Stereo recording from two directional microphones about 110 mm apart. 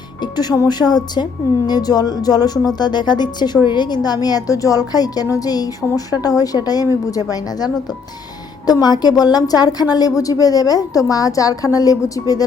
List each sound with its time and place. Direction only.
0.2 s a woman's voice: 40° left (ahead or behind)